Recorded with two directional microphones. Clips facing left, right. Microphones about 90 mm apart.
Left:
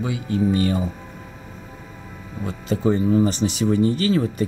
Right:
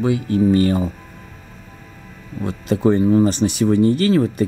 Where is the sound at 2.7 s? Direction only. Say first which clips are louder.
Right 4 dB; 55° right (ahead or behind).